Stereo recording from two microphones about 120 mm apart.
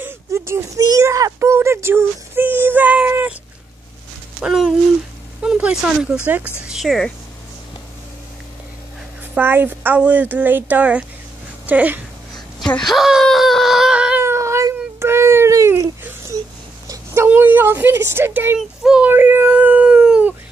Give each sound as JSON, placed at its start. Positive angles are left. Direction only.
{"t": 0.0, "sound": "speech", "side_deg": -20}
{"t": 4.4, "sound": "speech", "side_deg": -5}
{"t": 6.7, "sound": "speech", "side_deg": 0}
{"t": 9.3, "sound": "speech", "side_deg": -15}
{"t": 12.6, "sound": "speech", "side_deg": 5}
{"t": 14.2, "sound": "a sound", "side_deg": -20}
{"t": 18.6, "sound": "speech", "side_deg": -5}
{"t": 19.0, "sound": "howl", "side_deg": -15}